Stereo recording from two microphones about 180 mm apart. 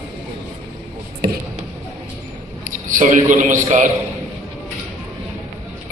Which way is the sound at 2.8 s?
45° right (ahead or behind).